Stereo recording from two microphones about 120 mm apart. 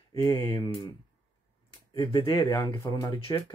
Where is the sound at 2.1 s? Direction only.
40° left (ahead or behind).